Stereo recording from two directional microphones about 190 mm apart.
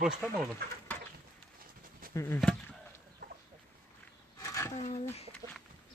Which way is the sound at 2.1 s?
15° left (ahead or behind).